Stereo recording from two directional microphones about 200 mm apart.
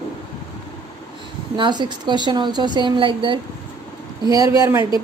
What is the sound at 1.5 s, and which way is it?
A woman's voice, 20° right (ahead or behind).